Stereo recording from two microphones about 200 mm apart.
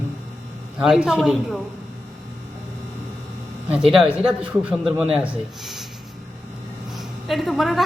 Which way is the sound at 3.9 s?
5° right (ahead or behind).